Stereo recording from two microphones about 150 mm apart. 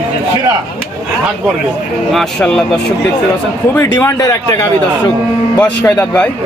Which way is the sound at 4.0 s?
20° left (ahead or behind).